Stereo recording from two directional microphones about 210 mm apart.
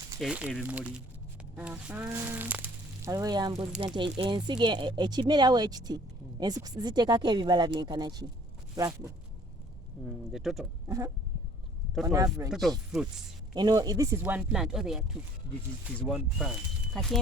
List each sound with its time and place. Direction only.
0.2 s speech: 5° right (ahead or behind); by 8.3 s 20° right (ahead or behind)
10.1 s speech: centre (ahead or behind)
10.8 s a sound: 15° right (ahead or behind)
12.0 s speech: 15° right (ahead or behind)
12.5 s speech: centre (ahead or behind)
13.5 s speech: 20° right (ahead or behind); by 17.2 s centre (ahead or behind)